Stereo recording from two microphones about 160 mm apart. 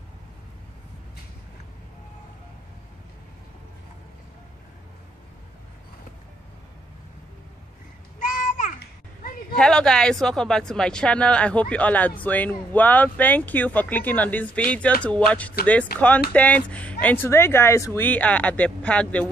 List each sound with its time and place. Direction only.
8.2 s a sound: 55° left (ahead or behind)
9.6 s speech: 5° left (ahead or behind)
15.9 s speech: 75° left (ahead or behind)
16.3 s speech: 10° left (ahead or behind)